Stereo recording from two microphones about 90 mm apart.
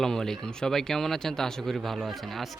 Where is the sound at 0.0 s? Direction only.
5° left (ahead or behind).